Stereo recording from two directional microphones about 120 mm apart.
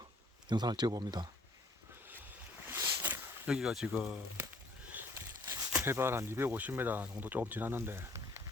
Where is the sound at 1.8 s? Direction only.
15° right (ahead or behind).